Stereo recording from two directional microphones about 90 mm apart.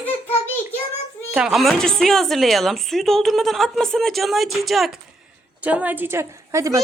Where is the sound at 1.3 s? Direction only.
10° right (ahead or behind).